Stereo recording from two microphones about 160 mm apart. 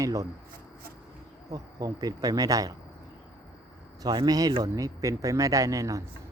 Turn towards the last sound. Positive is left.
turn(degrees=-20)  # may be behind; listen again after turning